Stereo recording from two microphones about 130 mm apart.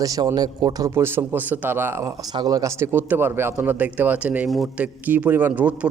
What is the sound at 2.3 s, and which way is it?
A man's voice, 30° right (ahead or behind).